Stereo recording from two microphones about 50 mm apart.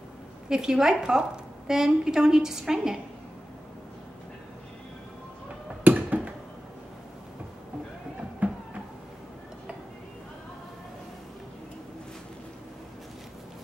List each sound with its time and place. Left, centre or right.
0.5 s a woman's voice: centre
5.9 s a sound: right
8.4 s music: right